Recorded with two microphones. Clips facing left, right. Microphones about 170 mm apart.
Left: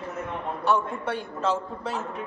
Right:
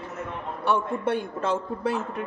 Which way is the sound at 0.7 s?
55° right (ahead or behind).